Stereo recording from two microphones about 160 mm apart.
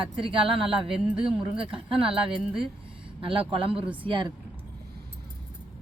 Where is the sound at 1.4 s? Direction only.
35° right (ahead or behind).